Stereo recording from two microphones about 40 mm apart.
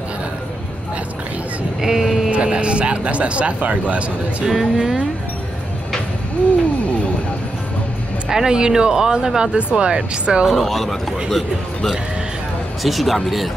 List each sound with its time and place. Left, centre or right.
1.8 s a sound: centre
2.3 s speech: right
4.5 s speech: centre
8.3 s speech: centre
10.5 s a man's voice: centre